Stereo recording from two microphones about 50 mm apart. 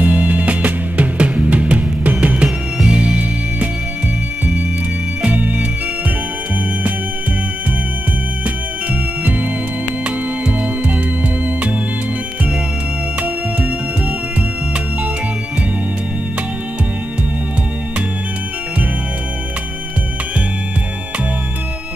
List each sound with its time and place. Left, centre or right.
0.0 s music: right
5.2 s organ: right
10.0 s music: right
13.2 s music: right